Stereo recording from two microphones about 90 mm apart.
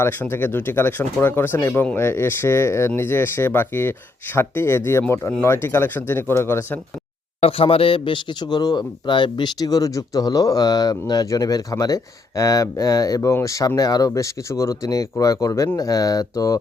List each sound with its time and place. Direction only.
0.0 s speech: 25° left (ahead or behind)
7.4 s a man's voice: 90° left; by 16.6 s 40° left (ahead or behind)